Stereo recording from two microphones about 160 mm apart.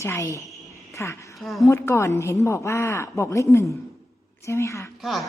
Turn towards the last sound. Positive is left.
turn(degrees=0)  # may be behind; listen again after turning